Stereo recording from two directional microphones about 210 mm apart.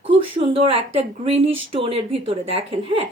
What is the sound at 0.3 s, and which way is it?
A woman's voice, 25° right (ahead or behind).